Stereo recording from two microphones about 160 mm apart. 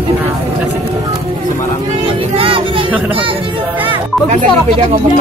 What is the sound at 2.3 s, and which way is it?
Music, 35° right (ahead or behind).